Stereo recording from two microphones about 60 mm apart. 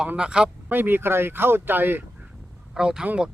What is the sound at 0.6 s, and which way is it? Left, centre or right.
Speech, right.